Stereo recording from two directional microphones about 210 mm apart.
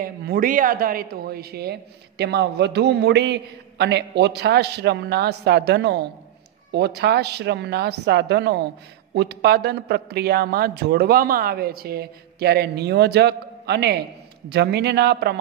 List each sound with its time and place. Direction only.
0.0 s a man's voice: 45° right (ahead or behind)